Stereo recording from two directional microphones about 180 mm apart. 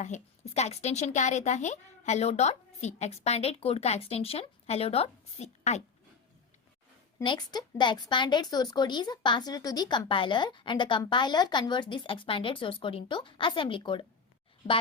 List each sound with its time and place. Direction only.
0.0 s speech: 40° left (ahead or behind)
7.2 s a woman's voice: 25° left (ahead or behind)